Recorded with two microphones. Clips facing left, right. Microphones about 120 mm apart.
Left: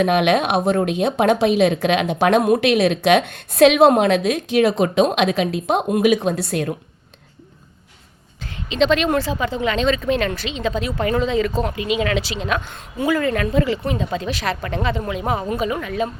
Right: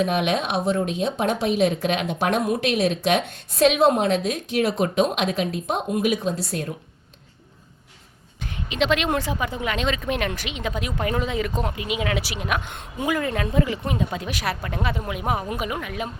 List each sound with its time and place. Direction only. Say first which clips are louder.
0.0 s speech: left 6 dB; 70° left (ahead or behind)
8.7 s speech: left 5 dB; 10° right (ahead or behind)
11.8 s speech: left 6 dB; 90° left
12.2 s speech: left 3 dB; 10° right (ahead or behind)